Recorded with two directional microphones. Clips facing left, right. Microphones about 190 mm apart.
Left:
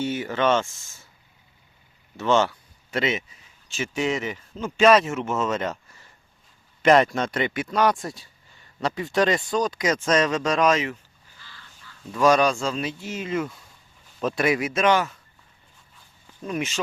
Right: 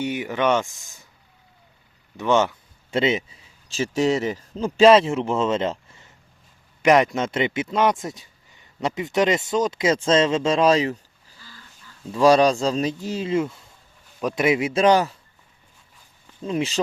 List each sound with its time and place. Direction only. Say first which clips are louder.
0.0 s speech: right 1 dB; 15° right (ahead or behind)
2.1 s speech: right 1 dB; 15° right (ahead or behind)
6.8 s speech: right 1 dB; 15° right (ahead or behind)
14.2 s speech: right 2 dB; 15° right (ahead or behind); by 15.2 s 35° right (ahead or behind)
16.4 s speech: right 4 dB; 25° right (ahead or behind)